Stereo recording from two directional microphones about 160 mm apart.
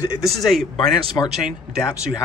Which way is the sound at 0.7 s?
25° left (ahead or behind).